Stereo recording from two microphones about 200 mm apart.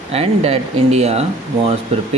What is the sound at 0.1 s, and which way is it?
Speech, 30° right (ahead or behind).